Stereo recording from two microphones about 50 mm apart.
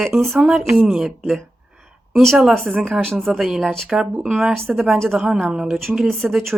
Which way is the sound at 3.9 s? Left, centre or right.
Centre.